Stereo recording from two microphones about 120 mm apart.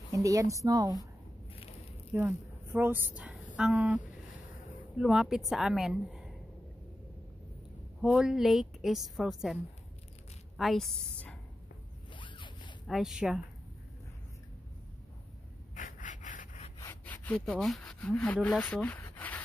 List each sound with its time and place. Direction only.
0.1 s a woman's voice: 30° right (ahead or behind)
1.5 s a sound: 55° left (ahead or behind)
2.1 s a woman's voice: 15° right (ahead or behind)
8.0 s a woman's voice: 5° right (ahead or behind)
10.6 s a woman's voice: centre (ahead or behind)
12.1 s zipper: 45° left (ahead or behind)
12.8 s a woman's voice: centre (ahead or behind)
15.7 s a sound: 90° left
16.9 s sawing: 15° left (ahead or behind)
18.0 s speech: 10° left (ahead or behind)
19.1 s a sound: 15° left (ahead or behind)